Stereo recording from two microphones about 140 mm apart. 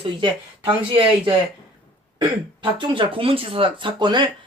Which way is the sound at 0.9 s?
35° right (ahead or behind).